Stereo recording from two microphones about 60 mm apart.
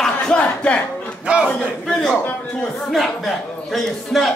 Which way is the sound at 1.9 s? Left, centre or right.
Centre.